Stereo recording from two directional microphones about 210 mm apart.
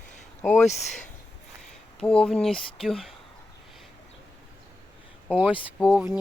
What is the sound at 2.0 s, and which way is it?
Speech, 5° left (ahead or behind).